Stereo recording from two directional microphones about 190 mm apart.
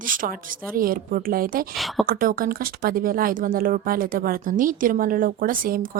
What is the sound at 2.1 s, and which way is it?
A woman's voice, 50° right (ahead or behind).